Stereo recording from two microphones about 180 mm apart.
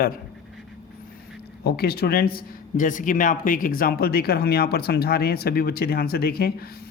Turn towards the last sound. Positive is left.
turn(degrees=60)  # may be behind; listen again after turning